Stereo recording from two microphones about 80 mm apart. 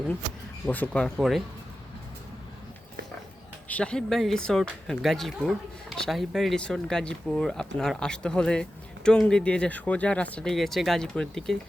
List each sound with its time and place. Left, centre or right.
0.6 s speech: centre
3.7 s speech: centre
4.1 s speech: centre
10.5 s speech: centre